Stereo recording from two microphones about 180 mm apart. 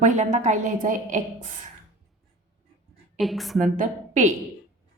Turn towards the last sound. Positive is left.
turn(degrees=-45)  # may be behind; listen again after turning